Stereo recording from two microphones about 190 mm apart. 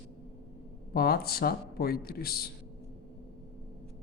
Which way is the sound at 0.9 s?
55° left (ahead or behind).